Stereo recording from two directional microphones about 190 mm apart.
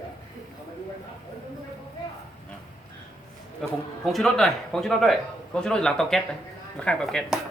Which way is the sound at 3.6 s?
Centre (ahead or behind).